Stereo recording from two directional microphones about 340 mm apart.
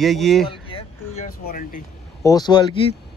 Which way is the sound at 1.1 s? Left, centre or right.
Left.